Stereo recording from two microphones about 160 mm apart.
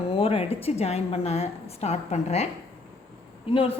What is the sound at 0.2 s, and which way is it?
A woman's voice, 40° left (ahead or behind).